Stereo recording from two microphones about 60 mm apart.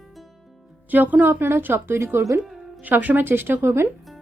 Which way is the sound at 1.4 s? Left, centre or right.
Right.